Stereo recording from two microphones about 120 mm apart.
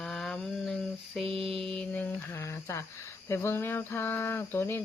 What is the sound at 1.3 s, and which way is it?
Mantra, 50° right (ahead or behind).